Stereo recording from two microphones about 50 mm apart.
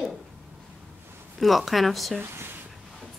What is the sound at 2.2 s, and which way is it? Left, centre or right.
Speech, right.